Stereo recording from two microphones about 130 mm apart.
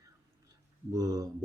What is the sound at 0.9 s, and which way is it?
Speech, 25° right (ahead or behind).